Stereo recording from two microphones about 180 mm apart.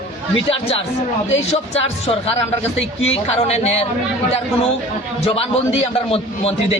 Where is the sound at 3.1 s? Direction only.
35° left (ahead or behind).